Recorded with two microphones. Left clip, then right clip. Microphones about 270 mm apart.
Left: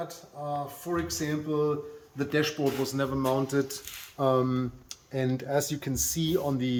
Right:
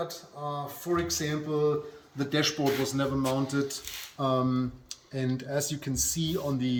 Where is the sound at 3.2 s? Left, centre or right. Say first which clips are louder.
Left 2 dB; centre.